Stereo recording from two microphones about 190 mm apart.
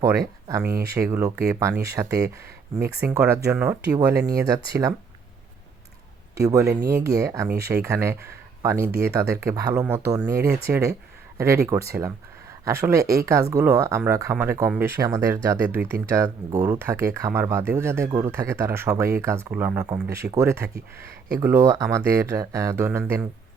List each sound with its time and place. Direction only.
0.4 s speech: 15° right (ahead or behind)
6.3 s speech: 15° right (ahead or behind)